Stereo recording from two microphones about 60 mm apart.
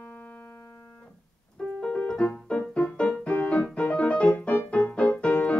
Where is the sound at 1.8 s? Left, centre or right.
Centre.